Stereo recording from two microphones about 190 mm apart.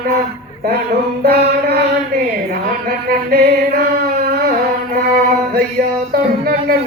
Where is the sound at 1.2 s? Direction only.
55° right (ahead or behind).